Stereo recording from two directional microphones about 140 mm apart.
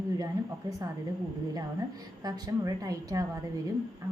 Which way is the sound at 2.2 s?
25° right (ahead or behind).